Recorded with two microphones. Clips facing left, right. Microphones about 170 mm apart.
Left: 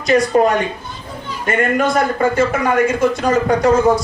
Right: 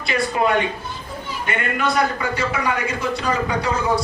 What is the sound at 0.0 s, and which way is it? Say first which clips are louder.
A man's voice: left 8 dB; 45° left (ahead or behind).